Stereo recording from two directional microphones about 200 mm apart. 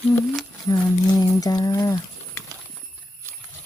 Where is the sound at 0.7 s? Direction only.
15° left (ahead or behind).